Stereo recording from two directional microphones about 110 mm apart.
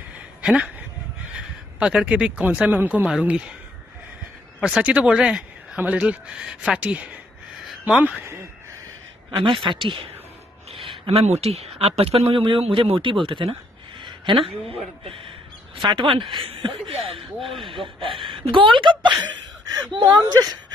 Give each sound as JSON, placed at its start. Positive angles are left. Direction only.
{"t": 0.4, "sound": "a sound", "side_deg": -10}
{"t": 1.3, "sound": "speech", "side_deg": -10}
{"t": 4.6, "sound": "speech", "side_deg": -10}
{"t": 9.3, "sound": "speech", "side_deg": -50}
{"t": 11.1, "sound": "speech", "side_deg": -70}
{"t": 17.4, "sound": "speech", "side_deg": 0}
{"t": 18.2, "sound": "a woman's voice", "side_deg": -50}